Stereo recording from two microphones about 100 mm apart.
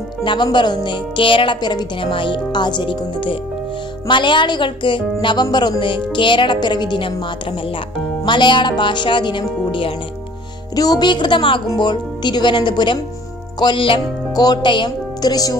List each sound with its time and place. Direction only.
0.2 s speech: 50° left (ahead or behind)
8.3 s speech: 50° left (ahead or behind)
10.8 s speech: 45° left (ahead or behind)
14.3 s speech: 40° left (ahead or behind)